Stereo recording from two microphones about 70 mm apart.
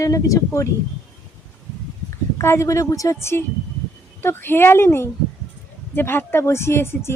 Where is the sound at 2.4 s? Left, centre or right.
Left.